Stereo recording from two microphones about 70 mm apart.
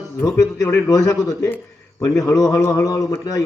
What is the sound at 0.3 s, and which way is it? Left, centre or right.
A man's voice, left.